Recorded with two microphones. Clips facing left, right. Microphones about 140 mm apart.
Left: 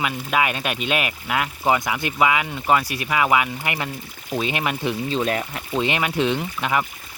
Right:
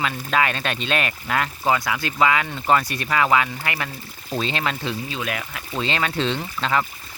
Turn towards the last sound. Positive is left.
turn(degrees=15)  # may be behind; listen again after turning